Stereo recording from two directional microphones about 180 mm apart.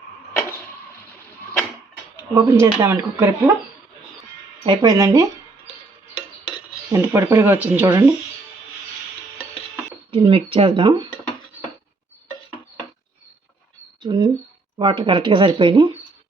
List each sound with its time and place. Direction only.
2.3 s speech: 15° right (ahead or behind)
4.6 s speech: 25° right (ahead or behind)
6.9 s speech: 15° right (ahead or behind)
10.1 s speech: 30° right (ahead or behind)
14.0 s speech: 25° right (ahead or behind)